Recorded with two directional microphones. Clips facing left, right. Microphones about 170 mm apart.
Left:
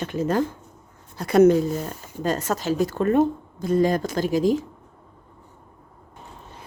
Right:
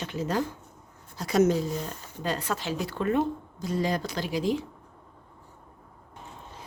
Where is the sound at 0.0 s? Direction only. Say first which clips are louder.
Left 6 dB; 50° left (ahead or behind).